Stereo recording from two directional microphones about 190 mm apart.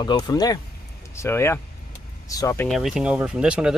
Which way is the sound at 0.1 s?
20° left (ahead or behind).